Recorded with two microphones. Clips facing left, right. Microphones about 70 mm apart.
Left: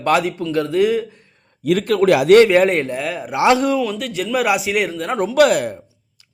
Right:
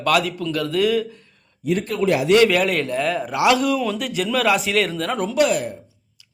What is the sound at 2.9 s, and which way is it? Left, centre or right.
Speech, centre.